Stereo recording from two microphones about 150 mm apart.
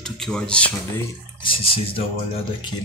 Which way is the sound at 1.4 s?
35° left (ahead or behind).